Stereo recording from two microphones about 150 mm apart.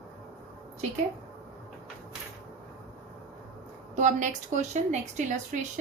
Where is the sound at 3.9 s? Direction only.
55° right (ahead or behind).